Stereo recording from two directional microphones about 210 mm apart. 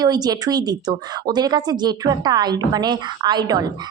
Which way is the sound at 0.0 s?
20° right (ahead or behind).